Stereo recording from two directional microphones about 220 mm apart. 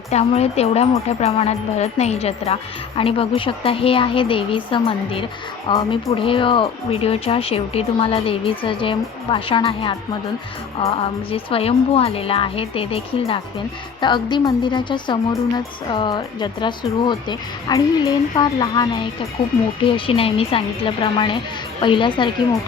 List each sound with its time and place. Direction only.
0.1 s speech: 30° left (ahead or behind)
10.9 s speech: 25° left (ahead or behind)